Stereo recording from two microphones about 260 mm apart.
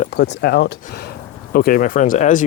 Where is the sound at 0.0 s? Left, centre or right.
Left.